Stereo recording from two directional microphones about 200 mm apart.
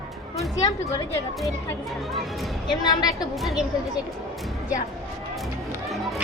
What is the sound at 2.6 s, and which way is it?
Speech, 20° left (ahead or behind).